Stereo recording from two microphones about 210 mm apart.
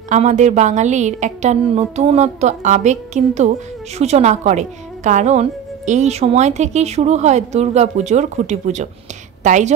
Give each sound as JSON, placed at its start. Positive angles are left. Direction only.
{"t": 0.1, "sound": "a woman's voice", "side_deg": -35}